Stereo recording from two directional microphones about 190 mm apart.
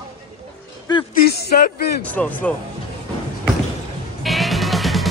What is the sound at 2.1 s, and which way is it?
Speech, 10° left (ahead or behind).